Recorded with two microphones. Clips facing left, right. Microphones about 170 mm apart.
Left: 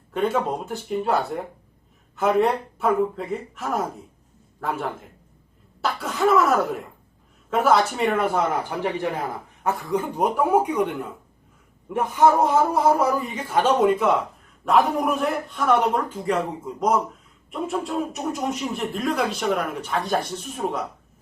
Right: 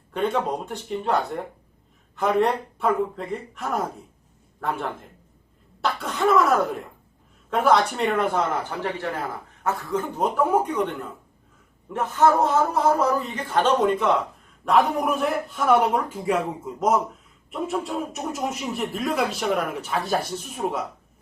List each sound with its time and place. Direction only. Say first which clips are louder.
0.1 s speech: left 1 dB; centre (ahead or behind)
8.8 s a man's voice: left 3 dB; 15° left (ahead or behind)
11.9 s a man's voice: left 1 dB; 10° left (ahead or behind)